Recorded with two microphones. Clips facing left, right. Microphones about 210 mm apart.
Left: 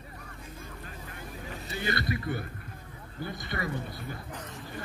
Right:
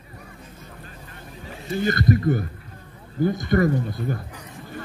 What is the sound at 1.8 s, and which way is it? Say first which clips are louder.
Speech: right 11 dB; 45° right (ahead or behind).